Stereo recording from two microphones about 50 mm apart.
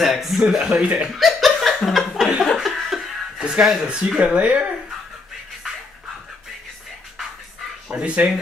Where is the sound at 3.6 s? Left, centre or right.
Centre.